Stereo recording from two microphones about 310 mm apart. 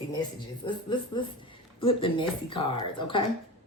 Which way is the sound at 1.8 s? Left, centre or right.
Centre.